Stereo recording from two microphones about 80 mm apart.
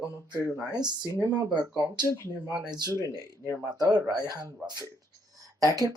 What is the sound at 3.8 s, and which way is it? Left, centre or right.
Speech, right.